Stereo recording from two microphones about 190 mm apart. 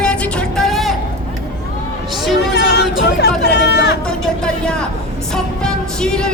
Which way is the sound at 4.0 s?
5° left (ahead or behind).